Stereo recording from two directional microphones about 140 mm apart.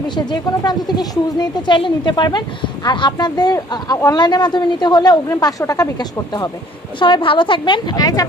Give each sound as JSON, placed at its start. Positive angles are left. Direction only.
{"t": 0.1, "sound": "speech", "side_deg": 30}